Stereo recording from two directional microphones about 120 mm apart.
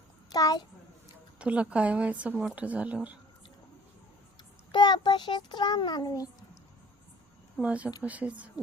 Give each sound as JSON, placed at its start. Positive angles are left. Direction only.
{"t": 0.3, "sound": "a child's voice", "side_deg": 30}
{"t": 1.4, "sound": "a woman's voice", "side_deg": -10}
{"t": 4.7, "sound": "a child's voice", "side_deg": 40}
{"t": 7.6, "sound": "a woman's voice", "side_deg": -10}